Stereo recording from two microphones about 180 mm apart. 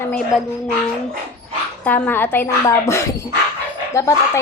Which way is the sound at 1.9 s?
10° left (ahead or behind).